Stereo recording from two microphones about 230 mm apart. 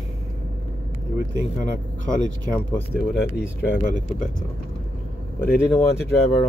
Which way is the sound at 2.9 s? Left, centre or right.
Left.